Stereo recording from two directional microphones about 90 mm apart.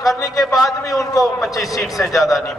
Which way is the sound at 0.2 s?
40° left (ahead or behind).